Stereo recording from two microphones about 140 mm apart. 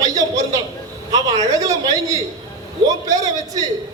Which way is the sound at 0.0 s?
25° right (ahead or behind).